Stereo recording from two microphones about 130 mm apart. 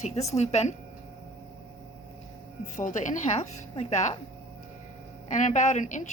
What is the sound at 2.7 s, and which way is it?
A woman's voice, 75° left (ahead or behind).